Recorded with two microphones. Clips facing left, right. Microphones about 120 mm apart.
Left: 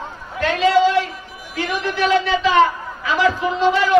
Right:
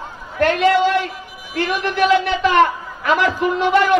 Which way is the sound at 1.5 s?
60° right (ahead or behind).